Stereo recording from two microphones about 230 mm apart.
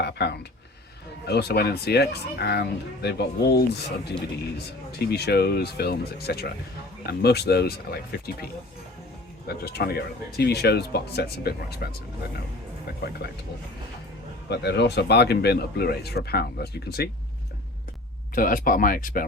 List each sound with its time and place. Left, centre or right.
0.0 s speech: left
9.5 s speech: left
13.0 s speech: left
14.5 s speech: left
18.3 s speech: left